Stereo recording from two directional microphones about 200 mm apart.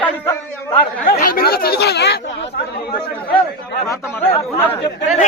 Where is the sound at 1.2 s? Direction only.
45° left (ahead or behind).